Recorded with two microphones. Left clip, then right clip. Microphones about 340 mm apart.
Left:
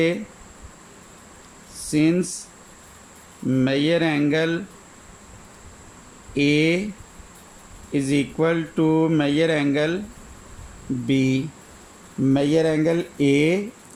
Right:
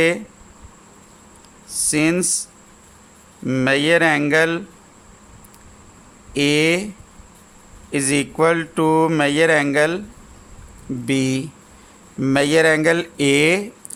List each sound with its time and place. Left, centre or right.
1.7 s speech: right
3.5 s speech: right
6.3 s speech: right
7.9 s speech: right
11.0 s speech: right